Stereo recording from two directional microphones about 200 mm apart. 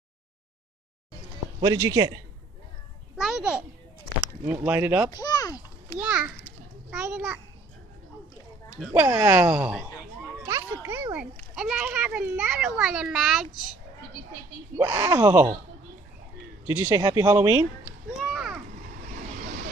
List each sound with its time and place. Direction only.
1.6 s a woman's voice: 15° right (ahead or behind)
3.2 s a child's voice: 5° right (ahead or behind)
5.1 s a sound: 20° left (ahead or behind)
5.9 s a woman's voice: 5° right (ahead or behind)
8.7 s a woman's voice: 5° right (ahead or behind)
10.4 s music: 15° right (ahead or behind)
11.5 s a child's voice: 5° right (ahead or behind)
14.8 s a woman's voice: 15° right (ahead or behind)
16.6 s a woman's voice: 10° right (ahead or behind)
18.1 s a sound: 5° right (ahead or behind)